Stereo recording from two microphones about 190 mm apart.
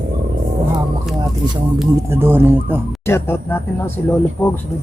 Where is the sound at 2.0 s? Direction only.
10° right (ahead or behind).